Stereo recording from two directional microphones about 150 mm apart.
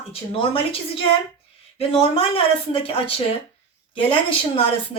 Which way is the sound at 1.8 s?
40° left (ahead or behind).